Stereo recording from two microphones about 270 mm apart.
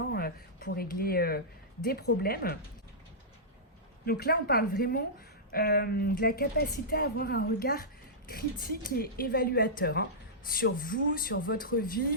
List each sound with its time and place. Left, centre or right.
0.1 s a woman's voice: left
4.0 s a woman's voice: left